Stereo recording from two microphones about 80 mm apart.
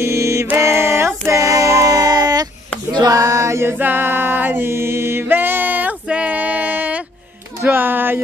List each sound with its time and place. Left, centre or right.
0.0 s mantra: right
0.6 s child singing: right
2.9 s male singing: right
3.7 s music: right
6.0 s female singing: centre
7.6 s a sound: right